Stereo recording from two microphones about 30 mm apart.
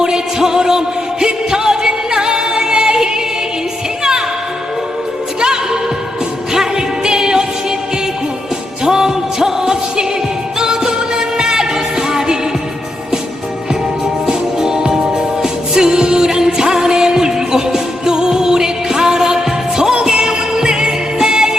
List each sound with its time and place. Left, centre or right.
0.0 s music: right
5.4 s music: right
8.8 s music: centre
14.3 s music: right